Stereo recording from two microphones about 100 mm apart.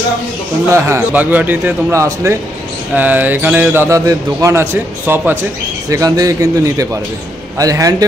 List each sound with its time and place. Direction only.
0.7 s a man's voice: 25° right (ahead or behind)
2.0 s a man's voice: 30° right (ahead or behind)
3.0 s a man's voice: 15° right (ahead or behind)
5.9 s a man's voice: 35° right (ahead or behind)